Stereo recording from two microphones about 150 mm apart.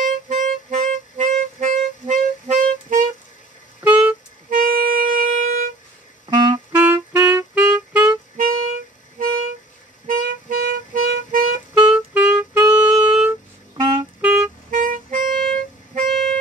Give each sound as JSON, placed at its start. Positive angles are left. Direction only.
{"t": 0.0, "sound": "clarinet", "side_deg": -55}
{"t": 3.8, "sound": "a sound", "side_deg": -10}
{"t": 4.5, "sound": "music", "side_deg": -70}
{"t": 6.3, "sound": "music", "side_deg": -30}
{"t": 6.7, "sound": "clarinet", "side_deg": -15}
{"t": 10.0, "sound": "music", "side_deg": -75}
{"t": 11.7, "sound": "music", "side_deg": -5}
{"t": 14.2, "sound": "clarinet", "side_deg": -5}
{"t": 14.7, "sound": "clarinet", "side_deg": -60}
{"t": 15.3, "sound": "music", "side_deg": 5}
{"t": 16.1, "sound": "toot", "side_deg": 5}